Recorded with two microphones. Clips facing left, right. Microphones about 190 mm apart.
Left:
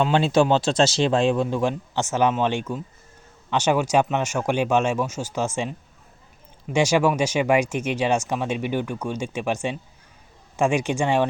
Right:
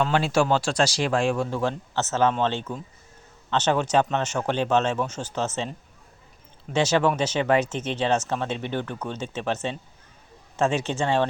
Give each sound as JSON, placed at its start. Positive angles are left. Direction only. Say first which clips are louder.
{"t": 0.0, "sound": "speech", "louder": "left 3 dB", "side_deg": 20}
{"t": 6.7, "sound": "speech", "louder": "left 2 dB", "side_deg": 10}